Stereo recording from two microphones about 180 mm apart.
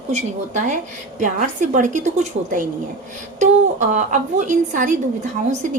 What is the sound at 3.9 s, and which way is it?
A woman's voice, 45° right (ahead or behind).